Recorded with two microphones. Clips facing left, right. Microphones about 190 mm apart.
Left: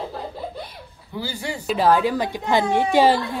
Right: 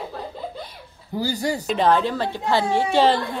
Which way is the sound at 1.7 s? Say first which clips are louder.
Left 2 dB; 5° left (ahead or behind).